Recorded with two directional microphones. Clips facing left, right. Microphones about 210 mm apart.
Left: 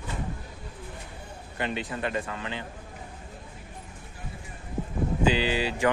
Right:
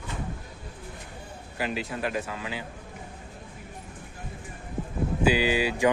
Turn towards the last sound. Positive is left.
turn(degrees=-10)  # may be behind; listen again after turning